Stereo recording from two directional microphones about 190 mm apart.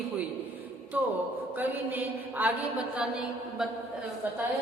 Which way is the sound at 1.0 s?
10° right (ahead or behind).